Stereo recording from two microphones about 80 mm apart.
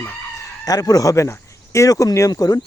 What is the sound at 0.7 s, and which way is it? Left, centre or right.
Speech, left.